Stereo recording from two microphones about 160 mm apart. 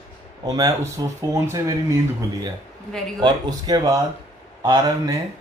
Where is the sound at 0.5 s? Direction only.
20° right (ahead or behind).